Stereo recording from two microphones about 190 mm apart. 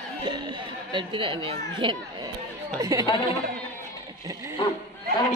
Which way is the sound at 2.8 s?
20° right (ahead or behind).